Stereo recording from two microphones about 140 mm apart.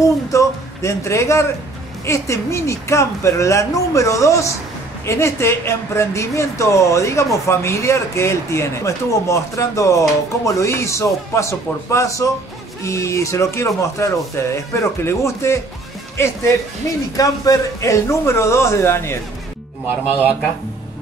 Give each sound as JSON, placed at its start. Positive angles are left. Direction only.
{"t": 0.0, "sound": "a woman's voice", "side_deg": 20}